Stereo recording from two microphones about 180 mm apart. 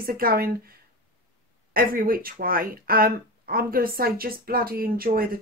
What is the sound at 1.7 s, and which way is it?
Speech, 55° right (ahead or behind).